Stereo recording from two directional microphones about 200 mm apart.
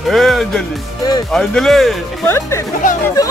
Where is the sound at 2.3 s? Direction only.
15° left (ahead or behind).